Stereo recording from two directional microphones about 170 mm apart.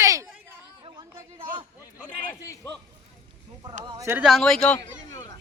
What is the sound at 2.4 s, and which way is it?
Speech, 15° left (ahead or behind).